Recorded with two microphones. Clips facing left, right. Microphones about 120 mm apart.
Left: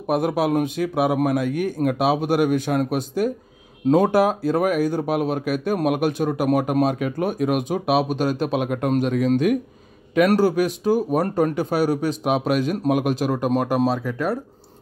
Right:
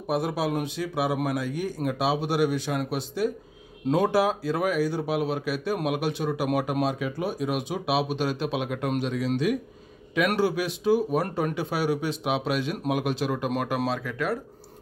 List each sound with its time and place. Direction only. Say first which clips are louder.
0.1 s speech: left 6 dB; 55° left (ahead or behind); by 14.4 s 35° left (ahead or behind)